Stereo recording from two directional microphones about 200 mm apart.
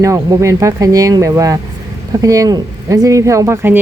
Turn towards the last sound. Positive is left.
turn(degrees=-10)  # may be behind; listen again after turning